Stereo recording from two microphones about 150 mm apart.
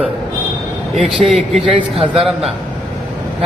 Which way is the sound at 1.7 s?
35° right (ahead or behind).